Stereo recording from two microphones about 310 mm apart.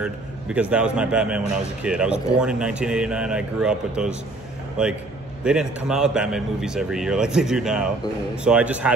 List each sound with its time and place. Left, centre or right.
0.0 s a man's voice: centre